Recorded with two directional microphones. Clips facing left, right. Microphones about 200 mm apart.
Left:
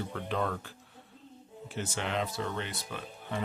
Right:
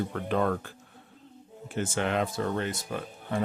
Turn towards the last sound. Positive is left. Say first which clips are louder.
# right 5 dB
turn(degrees=-45)  # may be behind; listen again after turning